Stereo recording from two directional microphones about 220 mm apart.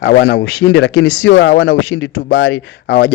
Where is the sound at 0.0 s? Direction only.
50° left (ahead or behind).